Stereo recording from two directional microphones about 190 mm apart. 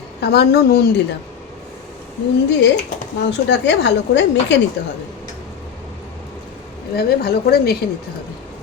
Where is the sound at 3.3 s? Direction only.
65° left (ahead or behind).